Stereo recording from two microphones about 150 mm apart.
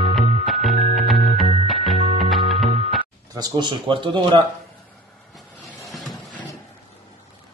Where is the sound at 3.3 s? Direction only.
30° right (ahead or behind).